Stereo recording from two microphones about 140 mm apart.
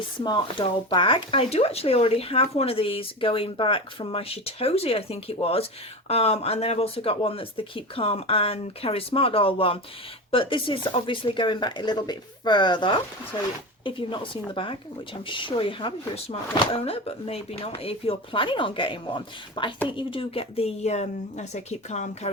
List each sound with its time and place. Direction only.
0.2 s speech: 30° left (ahead or behind); by 22.3 s 55° left (ahead or behind)